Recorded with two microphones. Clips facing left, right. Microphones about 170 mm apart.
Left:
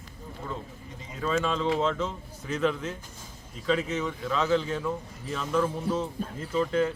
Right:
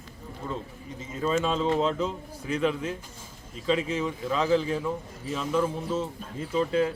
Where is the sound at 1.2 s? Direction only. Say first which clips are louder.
Right 2 dB; 20° right (ahead or behind).